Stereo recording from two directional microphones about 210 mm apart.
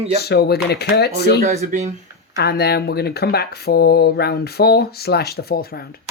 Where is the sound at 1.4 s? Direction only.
35° right (ahead or behind).